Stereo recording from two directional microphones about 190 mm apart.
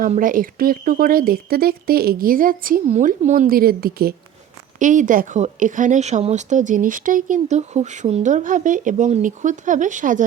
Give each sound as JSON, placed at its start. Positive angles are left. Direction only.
{"t": 0.1, "sound": "speech", "side_deg": -45}
{"t": 4.8, "sound": "a woman's voice", "side_deg": -40}